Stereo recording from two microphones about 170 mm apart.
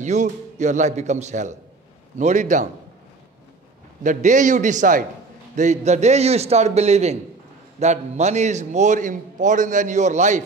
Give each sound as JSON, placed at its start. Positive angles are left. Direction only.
{"t": 0.0, "sound": "a man's voice", "side_deg": -45}
{"t": 4.0, "sound": "a man's voice", "side_deg": -45}